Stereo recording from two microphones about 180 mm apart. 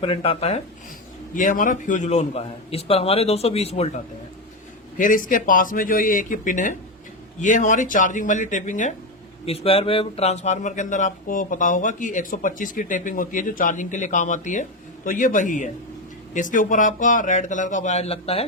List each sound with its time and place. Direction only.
0.0 s a man's voice: 30° left (ahead or behind)
1.3 s a man's voice: 45° left (ahead or behind)
4.9 s speech: 45° left (ahead or behind)
9.5 s speech: 35° left (ahead or behind)